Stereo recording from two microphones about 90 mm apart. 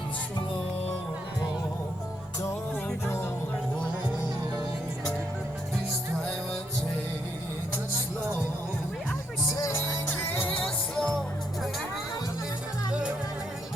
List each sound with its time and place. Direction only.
9.6 s music: 30° left (ahead or behind)
10.9 s music: 10° left (ahead or behind)
12.9 s music: 10° right (ahead or behind)